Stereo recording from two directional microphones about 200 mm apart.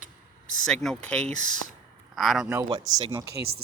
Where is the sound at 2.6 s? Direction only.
20° right (ahead or behind).